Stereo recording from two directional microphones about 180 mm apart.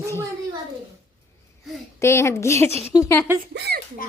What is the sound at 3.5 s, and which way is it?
Speech, 65° right (ahead or behind).